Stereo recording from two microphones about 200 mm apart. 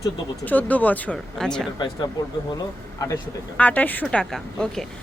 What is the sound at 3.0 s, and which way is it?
Speech, 15° left (ahead or behind).